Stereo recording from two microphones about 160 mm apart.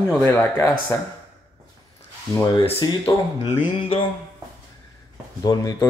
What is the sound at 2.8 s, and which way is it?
Speech, 25° left (ahead or behind).